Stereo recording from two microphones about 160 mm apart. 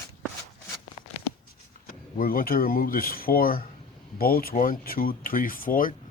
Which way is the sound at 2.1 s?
65° left (ahead or behind).